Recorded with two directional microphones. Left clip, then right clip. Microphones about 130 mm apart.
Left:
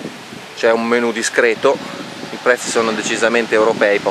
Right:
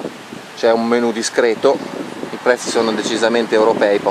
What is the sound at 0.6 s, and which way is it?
Speech, 20° left (ahead or behind).